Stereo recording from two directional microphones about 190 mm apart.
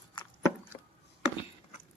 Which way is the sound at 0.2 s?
25° left (ahead or behind).